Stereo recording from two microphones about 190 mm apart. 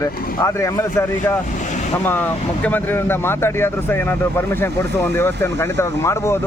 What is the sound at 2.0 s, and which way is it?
Speech, 10° left (ahead or behind).